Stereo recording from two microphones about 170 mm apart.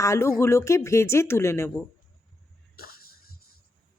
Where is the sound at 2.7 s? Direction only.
60° left (ahead or behind).